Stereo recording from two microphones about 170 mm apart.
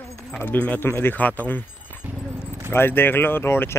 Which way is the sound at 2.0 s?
10° right (ahead or behind).